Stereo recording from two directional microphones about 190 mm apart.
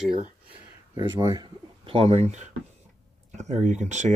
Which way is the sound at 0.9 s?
25° right (ahead or behind).